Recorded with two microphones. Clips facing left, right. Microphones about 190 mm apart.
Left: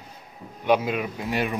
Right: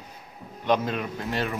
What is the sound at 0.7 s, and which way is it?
Speech, 10° left (ahead or behind).